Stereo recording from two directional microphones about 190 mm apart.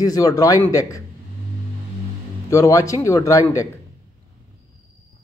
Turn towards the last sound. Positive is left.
turn(degrees=15)  # may be behind; listen again after turning